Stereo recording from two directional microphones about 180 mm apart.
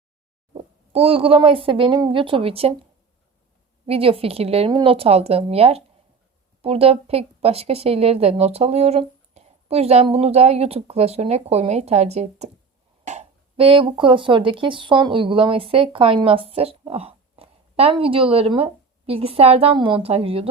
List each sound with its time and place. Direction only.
0.5 s speech: 30° right (ahead or behind)
3.8 s speech: 30° right (ahead or behind)